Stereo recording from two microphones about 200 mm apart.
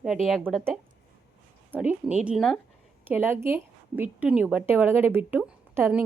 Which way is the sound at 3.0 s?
10° right (ahead or behind).